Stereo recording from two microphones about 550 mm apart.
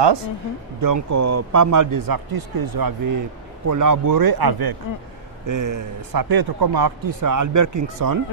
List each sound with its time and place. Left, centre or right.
0.0 s speech: right
0.7 s a man's voice: right